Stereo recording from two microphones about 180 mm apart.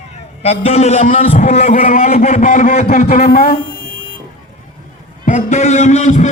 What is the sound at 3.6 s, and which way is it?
Music, 90° right.